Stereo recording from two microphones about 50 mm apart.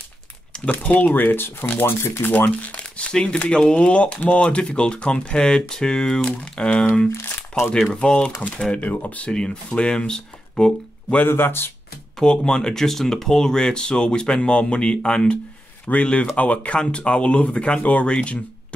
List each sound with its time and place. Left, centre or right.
0.7 s speech: left
2.3 s speech: left
2.7 s speech: left
7.1 s crumpling: left
7.7 s speech: centre
8.8 s speech: left
9.3 s speech: centre
11.2 s speech: left
12.2 s speech: centre